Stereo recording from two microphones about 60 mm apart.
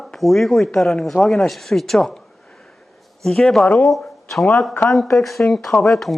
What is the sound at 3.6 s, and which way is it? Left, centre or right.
Speech, centre.